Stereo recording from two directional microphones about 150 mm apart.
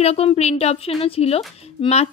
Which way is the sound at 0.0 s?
45° left (ahead or behind).